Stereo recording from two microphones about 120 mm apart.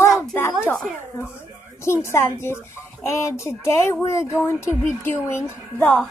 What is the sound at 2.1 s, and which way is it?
Speech, 20° left (ahead or behind).